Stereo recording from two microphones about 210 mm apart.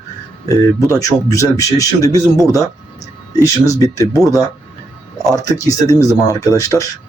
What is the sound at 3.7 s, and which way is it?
Speech, 15° left (ahead or behind).